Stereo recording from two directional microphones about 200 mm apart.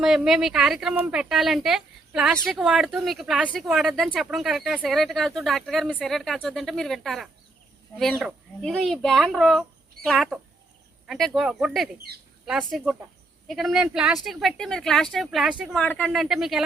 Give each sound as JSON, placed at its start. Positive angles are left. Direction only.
{"t": 0.0, "sound": "speech", "side_deg": 0}
{"t": 12.1, "sound": "speech", "side_deg": -50}
{"t": 12.5, "sound": "speech", "side_deg": 0}
{"t": 15.8, "sound": "speech", "side_deg": 5}